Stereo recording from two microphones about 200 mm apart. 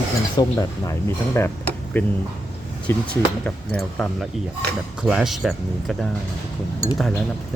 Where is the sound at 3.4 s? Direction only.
5° left (ahead or behind).